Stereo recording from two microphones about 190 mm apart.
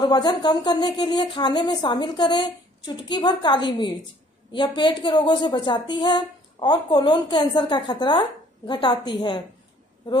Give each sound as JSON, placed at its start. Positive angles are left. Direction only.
{"t": 0.0, "sound": "a woman's voice", "side_deg": 20}